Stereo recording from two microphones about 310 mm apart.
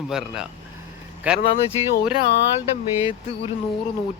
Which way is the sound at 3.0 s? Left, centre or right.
Centre.